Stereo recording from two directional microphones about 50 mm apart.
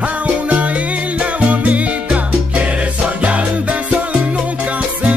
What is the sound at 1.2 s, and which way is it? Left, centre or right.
Music, right.